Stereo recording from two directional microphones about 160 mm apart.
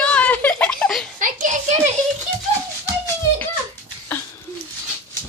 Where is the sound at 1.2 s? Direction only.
50° right (ahead or behind).